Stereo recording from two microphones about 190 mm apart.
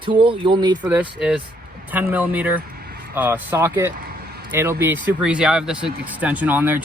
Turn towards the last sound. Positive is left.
turn(degrees=-10)  # may be behind; listen again after turning